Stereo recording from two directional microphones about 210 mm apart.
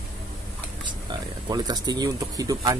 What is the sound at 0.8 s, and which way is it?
Speech, 20° right (ahead or behind).